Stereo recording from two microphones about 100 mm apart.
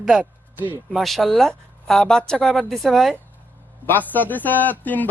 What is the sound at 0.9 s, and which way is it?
Speech, centre (ahead or behind).